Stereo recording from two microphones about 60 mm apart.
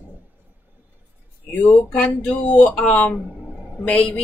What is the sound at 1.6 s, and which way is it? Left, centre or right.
Speech, left.